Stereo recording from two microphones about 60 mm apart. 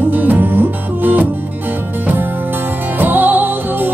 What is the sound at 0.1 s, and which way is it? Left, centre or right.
Music, right.